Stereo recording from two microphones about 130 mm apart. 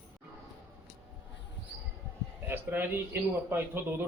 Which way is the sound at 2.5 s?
15° right (ahead or behind).